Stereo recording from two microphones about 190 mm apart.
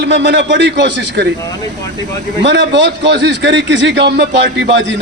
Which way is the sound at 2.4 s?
70° right (ahead or behind).